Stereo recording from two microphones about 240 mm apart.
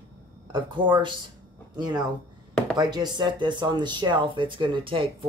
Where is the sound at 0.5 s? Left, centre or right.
Centre.